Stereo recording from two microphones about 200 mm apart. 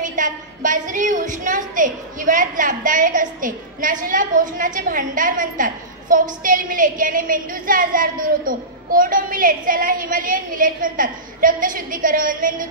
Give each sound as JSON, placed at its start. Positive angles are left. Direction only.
{"t": 0.0, "sound": "a woman's voice", "side_deg": -40}